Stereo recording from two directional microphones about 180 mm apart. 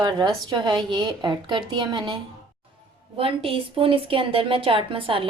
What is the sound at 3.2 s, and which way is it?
A woman's voice, 30° right (ahead or behind).